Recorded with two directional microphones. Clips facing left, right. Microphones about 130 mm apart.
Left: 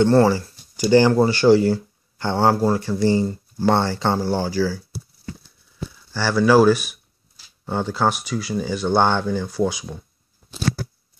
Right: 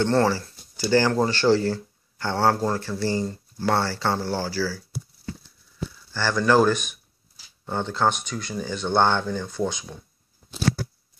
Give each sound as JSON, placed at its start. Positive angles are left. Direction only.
{"t": 0.0, "sound": "speech", "side_deg": 15}
{"t": 6.1, "sound": "speech", "side_deg": 10}